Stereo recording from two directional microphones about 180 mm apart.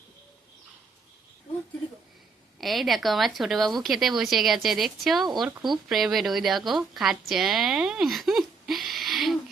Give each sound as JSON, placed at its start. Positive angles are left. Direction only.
{"t": 2.6, "sound": "a woman's voice", "side_deg": 0}